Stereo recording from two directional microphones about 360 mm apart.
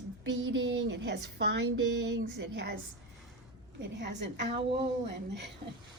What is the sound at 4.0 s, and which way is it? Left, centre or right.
Speech, right.